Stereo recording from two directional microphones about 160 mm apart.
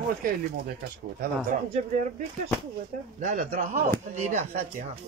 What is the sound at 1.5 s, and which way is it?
Speech, 55° right (ahead or behind).